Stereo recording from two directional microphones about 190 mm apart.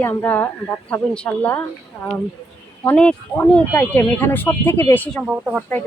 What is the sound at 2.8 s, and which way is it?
A woman's voice, 10° left (ahead or behind).